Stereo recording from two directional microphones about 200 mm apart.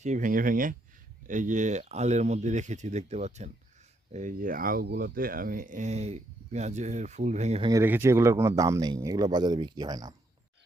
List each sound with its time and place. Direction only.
0.0 s speech: 40° right (ahead or behind)
7.7 s speech: 10° right (ahead or behind)